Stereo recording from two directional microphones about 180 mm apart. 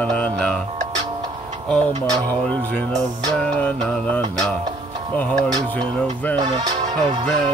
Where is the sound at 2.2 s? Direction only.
10° left (ahead or behind).